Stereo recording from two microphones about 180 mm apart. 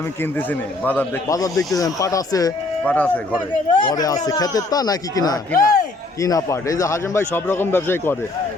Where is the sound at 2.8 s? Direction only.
10° left (ahead or behind).